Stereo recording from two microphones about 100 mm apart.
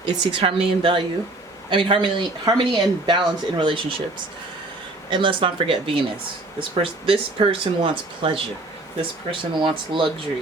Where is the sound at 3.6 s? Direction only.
60° right (ahead or behind).